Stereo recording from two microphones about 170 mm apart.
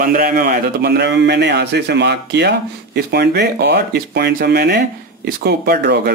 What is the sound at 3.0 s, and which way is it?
Speech, 70° right (ahead or behind).